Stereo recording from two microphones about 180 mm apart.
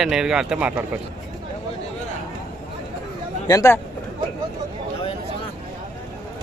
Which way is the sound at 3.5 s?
15° left (ahead or behind).